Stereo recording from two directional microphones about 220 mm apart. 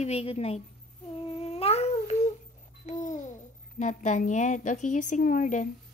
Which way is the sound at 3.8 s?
35° left (ahead or behind).